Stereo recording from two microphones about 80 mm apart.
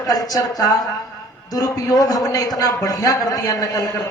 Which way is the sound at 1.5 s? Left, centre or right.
Left.